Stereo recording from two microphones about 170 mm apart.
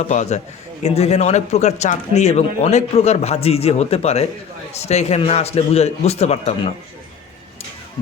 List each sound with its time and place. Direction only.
0.0 s a man's voice: 45° left (ahead or behind)